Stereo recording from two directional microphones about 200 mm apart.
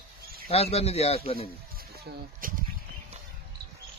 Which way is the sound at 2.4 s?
45° right (ahead or behind).